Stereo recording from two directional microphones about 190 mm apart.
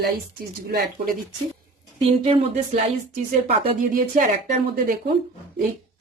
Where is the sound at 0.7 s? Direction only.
50° right (ahead or behind).